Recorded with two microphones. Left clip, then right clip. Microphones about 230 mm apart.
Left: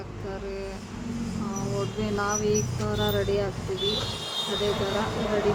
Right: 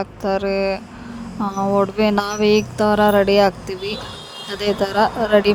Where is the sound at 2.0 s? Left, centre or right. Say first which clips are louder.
Right 10 dB; right.